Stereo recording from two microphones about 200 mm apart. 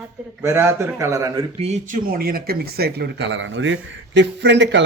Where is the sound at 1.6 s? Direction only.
35° right (ahead or behind).